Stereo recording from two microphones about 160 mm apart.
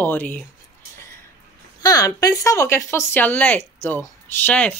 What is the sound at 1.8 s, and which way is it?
Speech, 20° left (ahead or behind).